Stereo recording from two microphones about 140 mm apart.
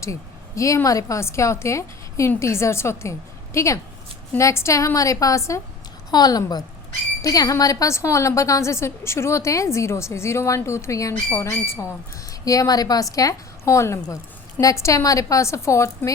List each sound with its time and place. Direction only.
0.0 s a woman's voice: 20° left (ahead or behind)